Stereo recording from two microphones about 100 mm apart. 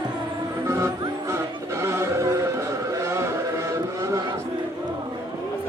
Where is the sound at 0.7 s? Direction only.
30° right (ahead or behind).